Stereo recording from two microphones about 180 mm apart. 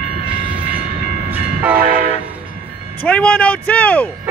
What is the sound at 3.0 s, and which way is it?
Speech, 5° left (ahead or behind).